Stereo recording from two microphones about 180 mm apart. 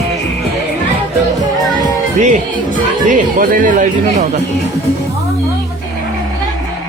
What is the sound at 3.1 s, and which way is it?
Speech, 50° right (ahead or behind).